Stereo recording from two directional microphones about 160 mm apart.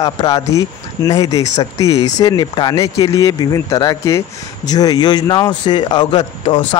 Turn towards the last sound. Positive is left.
turn(degrees=30)  # may be behind; listen again after turning